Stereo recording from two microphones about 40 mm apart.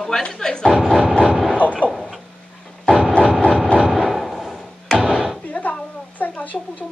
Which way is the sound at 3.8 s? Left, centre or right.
Centre.